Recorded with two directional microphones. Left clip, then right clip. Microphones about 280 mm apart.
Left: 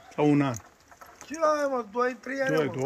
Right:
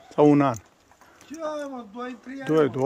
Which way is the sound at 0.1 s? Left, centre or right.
Centre.